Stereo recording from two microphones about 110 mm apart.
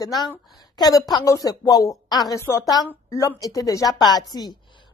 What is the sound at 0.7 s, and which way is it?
A woman's voice, 35° left (ahead or behind).